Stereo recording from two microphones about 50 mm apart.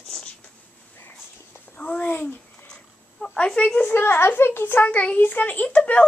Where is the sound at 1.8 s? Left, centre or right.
Left.